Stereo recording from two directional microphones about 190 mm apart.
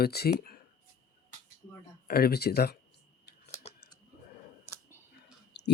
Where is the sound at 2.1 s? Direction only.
55° left (ahead or behind).